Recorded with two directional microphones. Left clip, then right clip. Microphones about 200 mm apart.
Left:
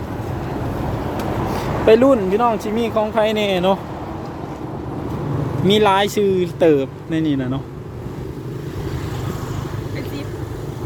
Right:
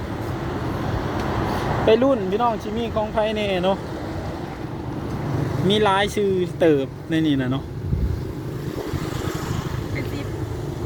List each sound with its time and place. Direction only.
1.9 s speech: 15° left (ahead or behind)
5.6 s speech: 10° left (ahead or behind)